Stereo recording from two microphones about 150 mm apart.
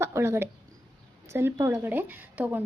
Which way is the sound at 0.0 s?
15° right (ahead or behind).